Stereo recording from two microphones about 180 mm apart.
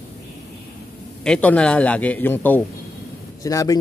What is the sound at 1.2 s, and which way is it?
A man's voice, 5° left (ahead or behind).